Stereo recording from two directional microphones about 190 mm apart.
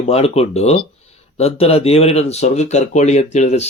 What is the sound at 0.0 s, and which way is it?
Speech, 35° left (ahead or behind).